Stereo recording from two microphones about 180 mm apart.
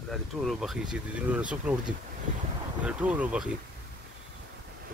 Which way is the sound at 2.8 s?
5° right (ahead or behind).